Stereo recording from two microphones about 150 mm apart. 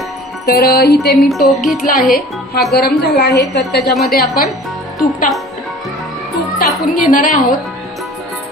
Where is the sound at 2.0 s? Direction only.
75° left (ahead or behind).